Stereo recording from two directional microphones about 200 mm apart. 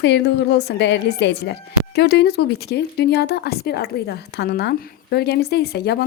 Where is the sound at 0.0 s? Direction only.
60° left (ahead or behind).